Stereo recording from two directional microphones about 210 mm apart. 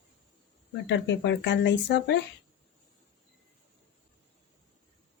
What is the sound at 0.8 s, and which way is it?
Speech, 55° left (ahead or behind).